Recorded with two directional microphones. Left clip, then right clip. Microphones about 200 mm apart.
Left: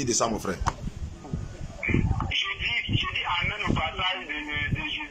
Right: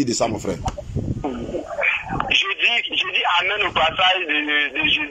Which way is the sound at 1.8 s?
50° right (ahead or behind).